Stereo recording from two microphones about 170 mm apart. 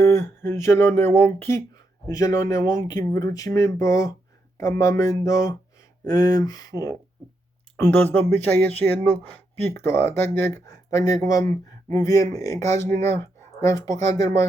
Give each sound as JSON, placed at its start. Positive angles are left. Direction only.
{"t": 0.0, "sound": "speech", "side_deg": 15}
{"t": 7.8, "sound": "speech", "side_deg": 10}
{"t": 9.7, "sound": "speech", "side_deg": 15}